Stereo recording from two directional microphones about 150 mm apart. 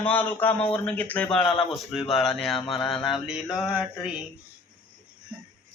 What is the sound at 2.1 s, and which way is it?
Mantra, centre (ahead or behind).